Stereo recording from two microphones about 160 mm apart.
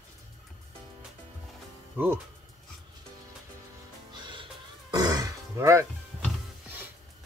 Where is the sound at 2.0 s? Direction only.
10° right (ahead or behind).